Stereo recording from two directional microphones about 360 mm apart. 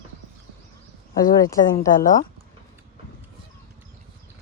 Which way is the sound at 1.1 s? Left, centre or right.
Centre.